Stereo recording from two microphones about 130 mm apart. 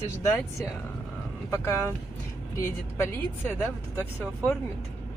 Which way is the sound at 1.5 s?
20° left (ahead or behind).